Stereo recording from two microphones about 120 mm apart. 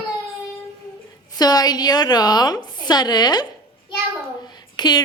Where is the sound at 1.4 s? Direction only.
35° left (ahead or behind).